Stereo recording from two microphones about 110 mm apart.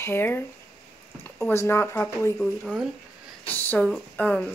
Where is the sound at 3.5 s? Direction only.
15° left (ahead or behind).